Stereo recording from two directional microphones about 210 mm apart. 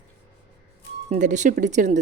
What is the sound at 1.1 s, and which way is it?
Speech, 35° right (ahead or behind).